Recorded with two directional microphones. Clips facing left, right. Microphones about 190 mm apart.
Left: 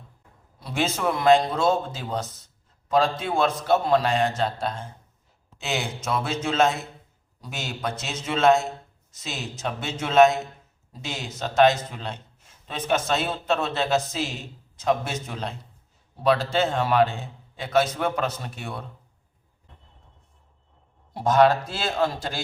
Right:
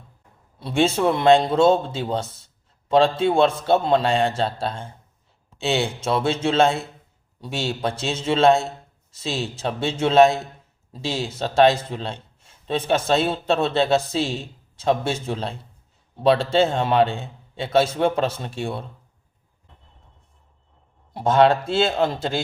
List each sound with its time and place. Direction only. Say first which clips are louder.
0.6 s a man's voice: right 6 dB; 30° right (ahead or behind)
21.1 s a man's voice: right 2 dB; 25° right (ahead or behind)